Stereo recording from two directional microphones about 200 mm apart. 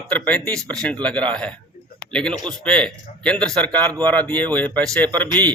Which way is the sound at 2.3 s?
20° right (ahead or behind).